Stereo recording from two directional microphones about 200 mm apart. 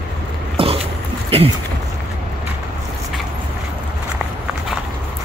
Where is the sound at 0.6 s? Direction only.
30° right (ahead or behind).